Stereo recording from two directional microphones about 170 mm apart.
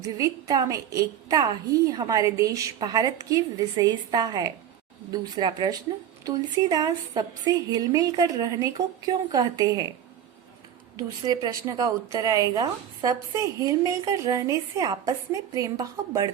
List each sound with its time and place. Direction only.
0.0 s a woman's voice: 20° right (ahead or behind)
10.9 s a woman's voice: 25° right (ahead or behind)